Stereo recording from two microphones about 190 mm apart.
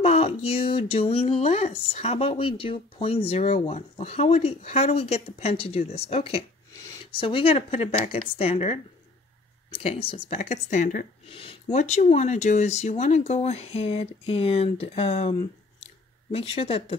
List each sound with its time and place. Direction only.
0.0 s speech: 35° left (ahead or behind)
11.2 s speech: 30° left (ahead or behind)
15.8 s a sound: 30° left (ahead or behind)